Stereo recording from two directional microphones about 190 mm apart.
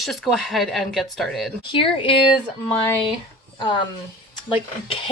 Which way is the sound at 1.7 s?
30° left (ahead or behind).